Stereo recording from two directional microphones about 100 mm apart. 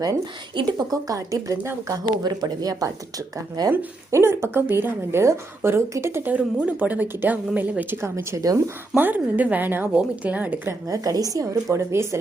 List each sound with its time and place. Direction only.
0.5 s speech: 40° right (ahead or behind)
4.1 s a woman's voice: 25° right (ahead or behind)
8.0 s a woman's voice: 25° right (ahead or behind)
9.0 s a woman's voice: 15° right (ahead or behind)
10.7 s speech: 35° right (ahead or behind)